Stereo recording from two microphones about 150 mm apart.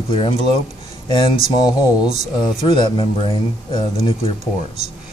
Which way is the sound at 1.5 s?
30° left (ahead or behind).